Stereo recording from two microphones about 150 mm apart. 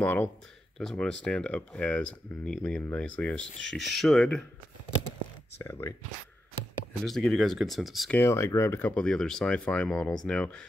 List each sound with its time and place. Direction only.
0.0 s speech: 15° left (ahead or behind)
5.6 s speech: 20° left (ahead or behind)
7.1 s speech: centre (ahead or behind)
8.1 s speech: 15° left (ahead or behind)